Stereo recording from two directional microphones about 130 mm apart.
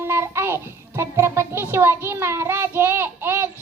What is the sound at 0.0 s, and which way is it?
Child singing, 20° right (ahead or behind).